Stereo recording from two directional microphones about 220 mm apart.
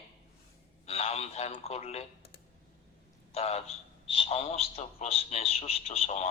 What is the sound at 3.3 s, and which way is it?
A man's voice, 30° left (ahead or behind).